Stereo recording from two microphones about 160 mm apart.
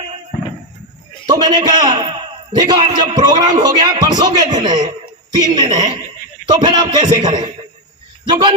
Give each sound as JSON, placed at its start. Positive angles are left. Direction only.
{"t": 1.3, "sound": "a man's voice", "side_deg": -25}